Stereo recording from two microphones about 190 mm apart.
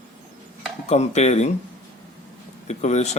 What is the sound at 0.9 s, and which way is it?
Speech, 35° left (ahead or behind).